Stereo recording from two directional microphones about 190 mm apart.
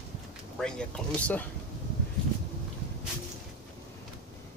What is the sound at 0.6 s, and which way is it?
Speech, 5° left (ahead or behind).